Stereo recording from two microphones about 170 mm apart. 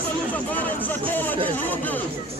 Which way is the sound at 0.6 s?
10° left (ahead or behind).